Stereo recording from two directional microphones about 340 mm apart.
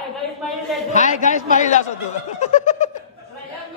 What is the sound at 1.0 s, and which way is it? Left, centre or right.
Speech, left.